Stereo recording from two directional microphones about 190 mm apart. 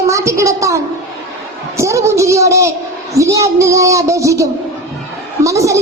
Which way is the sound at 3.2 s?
15° right (ahead or behind).